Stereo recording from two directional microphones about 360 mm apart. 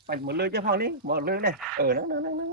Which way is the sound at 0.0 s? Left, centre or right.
Right.